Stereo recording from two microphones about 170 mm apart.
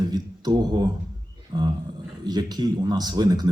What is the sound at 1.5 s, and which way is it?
A man's voice, 25° right (ahead or behind).